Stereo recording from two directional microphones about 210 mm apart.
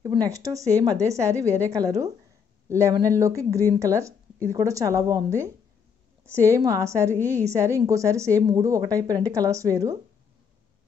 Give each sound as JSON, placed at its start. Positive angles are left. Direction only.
{"t": 0.2, "sound": "a woman's voice", "side_deg": -15}
{"t": 6.2, "sound": "a woman's voice", "side_deg": 5}
{"t": 6.5, "sound": "a woman's voice", "side_deg": -15}